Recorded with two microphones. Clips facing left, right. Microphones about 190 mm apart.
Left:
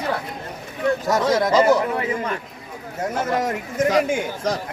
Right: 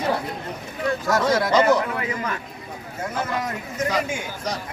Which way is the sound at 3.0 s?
45° left (ahead or behind).